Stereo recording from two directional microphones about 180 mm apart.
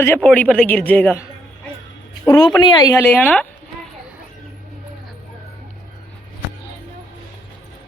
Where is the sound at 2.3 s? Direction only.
20° left (ahead or behind).